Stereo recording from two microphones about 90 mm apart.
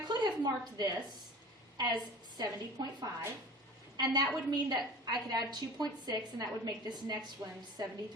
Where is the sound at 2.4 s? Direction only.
50° right (ahead or behind).